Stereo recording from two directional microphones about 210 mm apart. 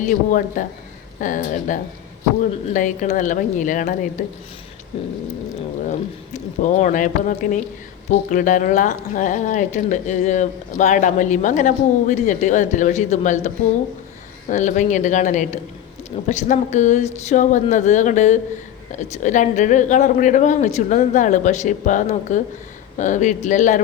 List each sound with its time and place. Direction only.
0.0 s a woman's voice: 40° left (ahead or behind)
5.8 s a woman's voice: 35° left (ahead or behind)
14.5 s a woman's voice: 35° left (ahead or behind)